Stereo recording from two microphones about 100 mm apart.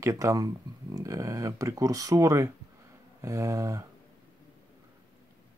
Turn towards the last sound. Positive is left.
turn(degrees=-30)  # may be behind; listen again after turning